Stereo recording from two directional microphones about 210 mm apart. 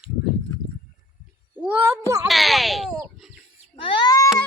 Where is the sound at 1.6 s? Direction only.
5° right (ahead or behind).